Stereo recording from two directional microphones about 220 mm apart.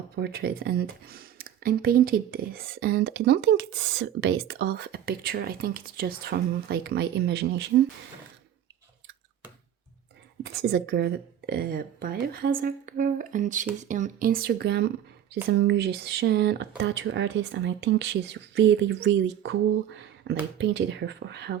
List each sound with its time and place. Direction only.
0.2 s speech: 45° right (ahead or behind)
10.4 s a woman's voice: 50° right (ahead or behind)